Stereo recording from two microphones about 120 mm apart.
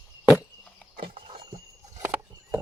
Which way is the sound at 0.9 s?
50° right (ahead or behind).